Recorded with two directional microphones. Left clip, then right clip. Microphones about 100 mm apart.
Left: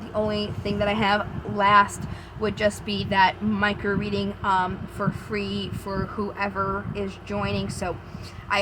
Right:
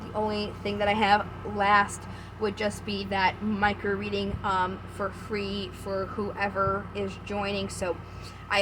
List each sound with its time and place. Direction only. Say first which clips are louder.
0.2 s a woman's voice: left 3 dB; 35° left (ahead or behind)